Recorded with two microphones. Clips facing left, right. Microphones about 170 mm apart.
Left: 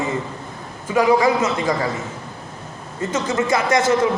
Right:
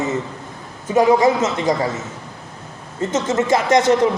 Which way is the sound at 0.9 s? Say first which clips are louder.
Right 2 dB; 25° right (ahead or behind).